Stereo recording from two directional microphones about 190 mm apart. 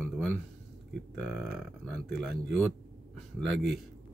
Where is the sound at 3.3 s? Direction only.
Centre (ahead or behind).